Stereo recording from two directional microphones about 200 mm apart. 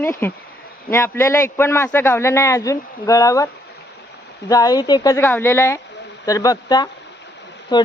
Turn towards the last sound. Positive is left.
turn(degrees=20)  # may be behind; listen again after turning